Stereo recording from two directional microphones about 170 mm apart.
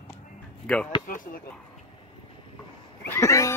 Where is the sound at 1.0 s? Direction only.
50° left (ahead or behind).